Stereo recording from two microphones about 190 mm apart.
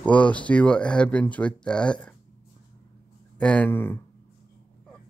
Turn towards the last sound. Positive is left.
turn(degrees=10)  # may be behind; listen again after turning